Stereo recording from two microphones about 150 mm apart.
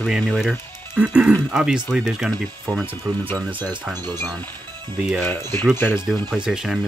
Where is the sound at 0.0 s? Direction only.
Centre (ahead or behind).